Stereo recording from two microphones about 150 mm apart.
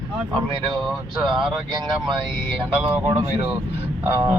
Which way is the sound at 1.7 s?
30° right (ahead or behind).